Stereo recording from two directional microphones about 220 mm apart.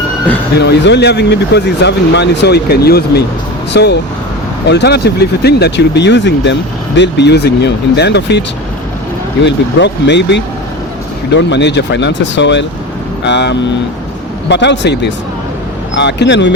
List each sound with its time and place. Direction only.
0.6 s speech: 50° left (ahead or behind)